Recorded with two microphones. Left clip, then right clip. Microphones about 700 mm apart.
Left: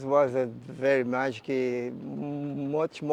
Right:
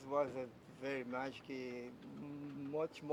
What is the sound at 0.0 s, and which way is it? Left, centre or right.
Speech, left.